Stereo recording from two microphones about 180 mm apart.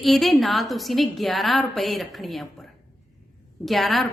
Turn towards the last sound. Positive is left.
turn(degrees=0)  # may be behind; listen again after turning